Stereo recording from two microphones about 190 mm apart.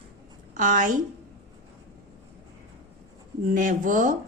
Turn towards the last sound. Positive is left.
turn(degrees=-45)  # may be behind; listen again after turning